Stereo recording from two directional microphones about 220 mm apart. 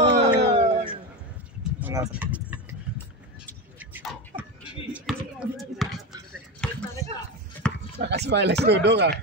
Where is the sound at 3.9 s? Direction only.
5° right (ahead or behind).